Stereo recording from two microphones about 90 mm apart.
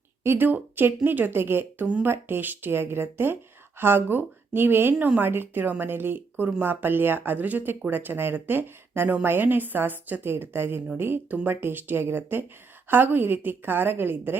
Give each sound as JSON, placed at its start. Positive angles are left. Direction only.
{"t": 0.2, "sound": "speech", "side_deg": -25}